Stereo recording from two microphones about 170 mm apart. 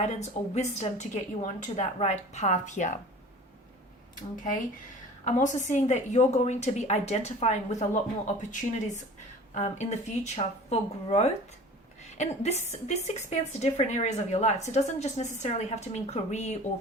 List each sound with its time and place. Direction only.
0.1 s a woman's voice: 40° left (ahead or behind)
5.4 s a woman's voice: 45° left (ahead or behind)